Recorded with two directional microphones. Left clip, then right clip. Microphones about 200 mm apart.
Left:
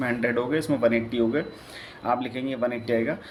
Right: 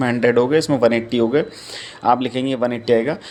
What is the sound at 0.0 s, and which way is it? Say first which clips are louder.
Speech: right 9 dB; 40° right (ahead or behind).